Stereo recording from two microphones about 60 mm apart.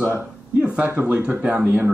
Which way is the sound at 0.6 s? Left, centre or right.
Right.